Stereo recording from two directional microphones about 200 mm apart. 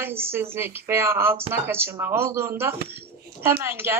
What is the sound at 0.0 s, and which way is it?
Speech, 10° right (ahead or behind).